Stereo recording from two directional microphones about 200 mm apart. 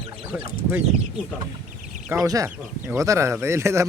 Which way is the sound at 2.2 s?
15° right (ahead or behind).